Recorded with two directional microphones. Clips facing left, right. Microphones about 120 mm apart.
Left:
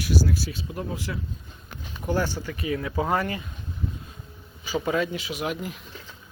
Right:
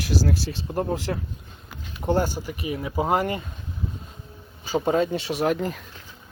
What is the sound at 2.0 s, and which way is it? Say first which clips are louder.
Speech: right 3 dB; 25° right (ahead or behind).